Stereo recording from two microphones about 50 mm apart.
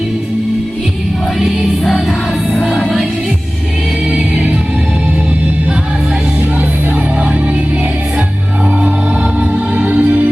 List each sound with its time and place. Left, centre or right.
1.4 s music: centre
2.6 s music: centre
4.1 s music: centre
7.2 s music: right
9.4 s music: right